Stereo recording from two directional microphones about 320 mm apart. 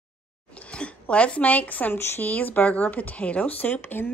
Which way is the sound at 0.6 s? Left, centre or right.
Centre.